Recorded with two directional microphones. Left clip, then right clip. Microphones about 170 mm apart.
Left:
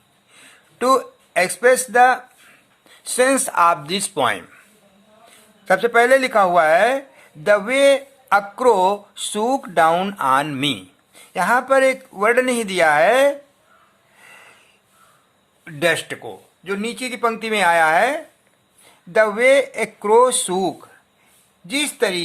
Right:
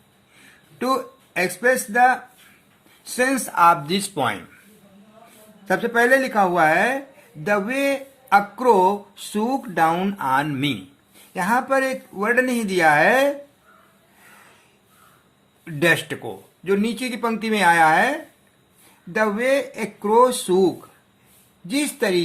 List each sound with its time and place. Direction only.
0.8 s speech: 50° left (ahead or behind)
5.6 s speech: 55° left (ahead or behind)
15.6 s speech: 25° left (ahead or behind); by 20.7 s 55° left (ahead or behind)
21.7 s speech: 35° left (ahead or behind)